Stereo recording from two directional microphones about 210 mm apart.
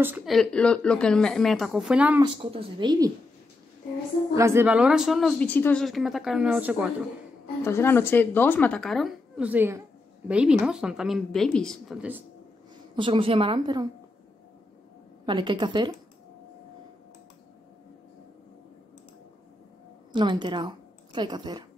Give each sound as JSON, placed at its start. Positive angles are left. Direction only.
{"t": 0.0, "sound": "speech", "side_deg": -5}
{"t": 2.2, "sound": "a woman's voice", "side_deg": -20}
{"t": 4.4, "sound": "speech", "side_deg": -10}
{"t": 7.6, "sound": "a woman's voice", "side_deg": 10}
{"t": 12.9, "sound": "a woman's voice", "side_deg": -25}
{"t": 15.2, "sound": "a woman's voice", "side_deg": -20}
{"t": 20.1, "sound": "a woman's voice", "side_deg": -20}